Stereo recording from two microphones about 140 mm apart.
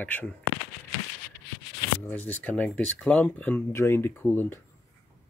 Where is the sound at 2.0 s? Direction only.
10° left (ahead or behind).